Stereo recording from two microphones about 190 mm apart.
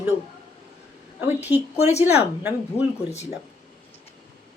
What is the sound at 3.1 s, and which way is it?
Speech, 35° left (ahead or behind).